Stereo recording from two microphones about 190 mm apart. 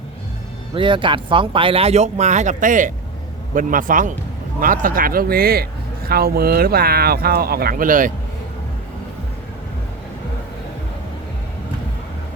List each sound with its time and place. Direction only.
0.7 s speech: 25° right (ahead or behind); by 8.1 s 45° right (ahead or behind)